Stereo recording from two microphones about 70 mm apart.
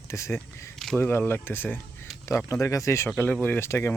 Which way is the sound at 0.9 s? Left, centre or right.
Left.